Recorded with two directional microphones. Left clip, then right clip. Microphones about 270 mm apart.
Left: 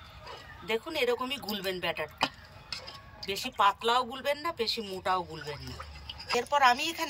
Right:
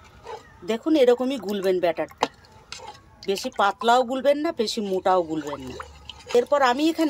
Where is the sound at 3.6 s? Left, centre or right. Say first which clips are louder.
Right 6 dB; right.